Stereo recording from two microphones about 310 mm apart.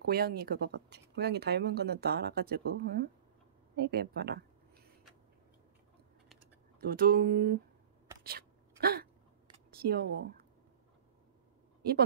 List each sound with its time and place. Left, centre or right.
0.0 s speech: right
6.8 s speech: right
8.2 s sneeze: right
9.7 s speech: right